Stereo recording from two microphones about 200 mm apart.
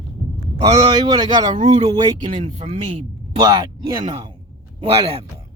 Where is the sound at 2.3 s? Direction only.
35° right (ahead or behind).